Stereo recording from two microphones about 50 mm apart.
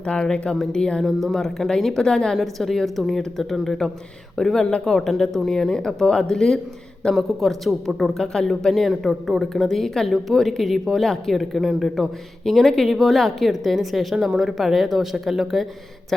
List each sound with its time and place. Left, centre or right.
0.0 s a woman's voice: left
1.0 s a woman's voice: centre
8.2 s a woman's voice: centre
8.7 s a woman's voice: centre
11.6 s a man's voice: centre
12.5 s a woman's voice: centre